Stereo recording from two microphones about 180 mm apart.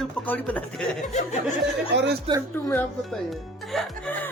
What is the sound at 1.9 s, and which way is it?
Speech, 75° right (ahead or behind).